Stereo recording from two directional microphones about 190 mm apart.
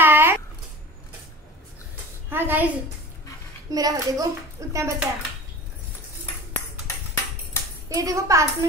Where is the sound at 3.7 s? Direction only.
20° right (ahead or behind).